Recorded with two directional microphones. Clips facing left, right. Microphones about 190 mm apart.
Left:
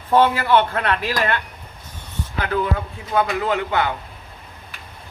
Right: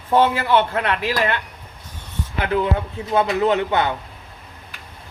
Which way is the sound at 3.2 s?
20° right (ahead or behind).